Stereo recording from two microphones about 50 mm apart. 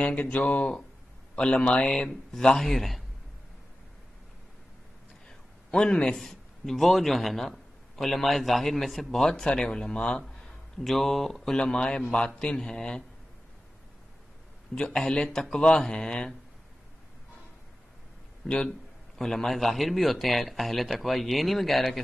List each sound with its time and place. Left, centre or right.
0.0 s speech: left
1.9 s speech: centre
5.7 s speech: centre
6.1 s a man's voice: centre
9.3 s speech: centre
9.9 s speech: left
10.8 s a man's voice: centre
11.5 s speech: centre
14.8 s speech: centre
18.6 s a man's voice: centre